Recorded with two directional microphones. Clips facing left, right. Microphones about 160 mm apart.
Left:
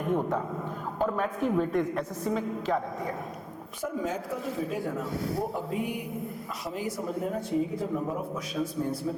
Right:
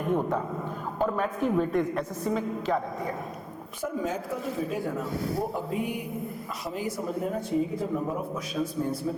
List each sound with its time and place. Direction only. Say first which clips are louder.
0.0 s a sound: right 1 dB; 20° right (ahead or behind)
0.9 s speech: right 1 dB; 20° right (ahead or behind)
7.0 s speech: right 1 dB; 15° right (ahead or behind)